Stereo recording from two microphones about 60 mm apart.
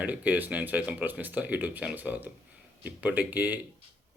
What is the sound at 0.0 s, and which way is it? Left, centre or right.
Speech, right.